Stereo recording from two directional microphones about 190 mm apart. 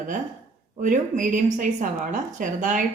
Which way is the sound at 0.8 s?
45° right (ahead or behind).